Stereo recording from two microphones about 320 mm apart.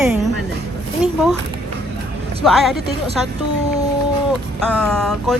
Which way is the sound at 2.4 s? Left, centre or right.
Centre.